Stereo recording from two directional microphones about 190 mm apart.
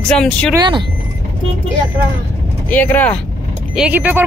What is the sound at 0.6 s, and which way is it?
Speech, 25° right (ahead or behind).